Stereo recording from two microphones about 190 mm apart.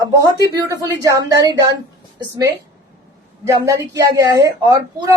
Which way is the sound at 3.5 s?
20° right (ahead or behind).